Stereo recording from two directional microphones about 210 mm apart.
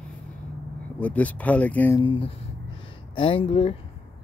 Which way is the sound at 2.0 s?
25° left (ahead or behind).